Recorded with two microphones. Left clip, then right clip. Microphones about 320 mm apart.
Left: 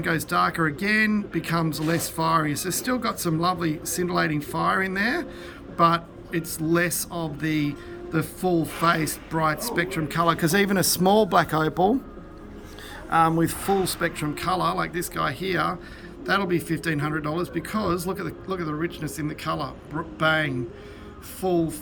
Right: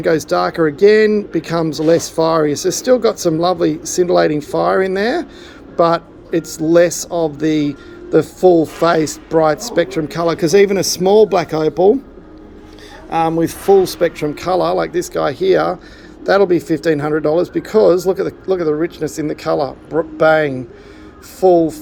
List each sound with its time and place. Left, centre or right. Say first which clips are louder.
0.0 s speech: right 8 dB; centre
13.1 s speech: right 5 dB; centre
21.4 s speech: right 15 dB; right